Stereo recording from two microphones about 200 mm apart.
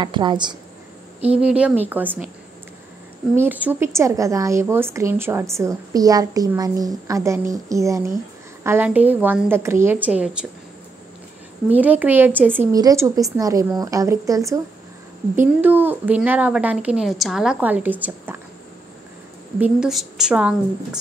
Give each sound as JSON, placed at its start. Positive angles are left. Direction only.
{"t": 0.0, "sound": "a woman's voice", "side_deg": -25}
{"t": 1.4, "sound": "a woman's voice", "side_deg": -5}
{"t": 3.3, "sound": "a woman's voice", "side_deg": -10}
{"t": 11.7, "sound": "a woman's voice", "side_deg": -10}
{"t": 19.6, "sound": "a woman's voice", "side_deg": -5}